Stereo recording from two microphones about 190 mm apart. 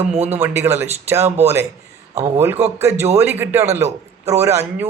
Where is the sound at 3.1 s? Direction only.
10° right (ahead or behind).